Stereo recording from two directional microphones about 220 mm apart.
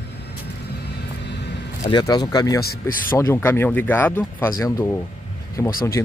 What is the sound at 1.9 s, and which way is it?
Speech, 20° left (ahead or behind).